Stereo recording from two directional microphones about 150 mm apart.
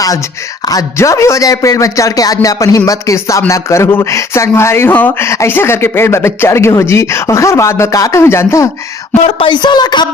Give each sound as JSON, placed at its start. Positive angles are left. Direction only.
{"t": 0.6, "sound": "speech", "side_deg": 25}
{"t": 9.2, "sound": "speech", "side_deg": 35}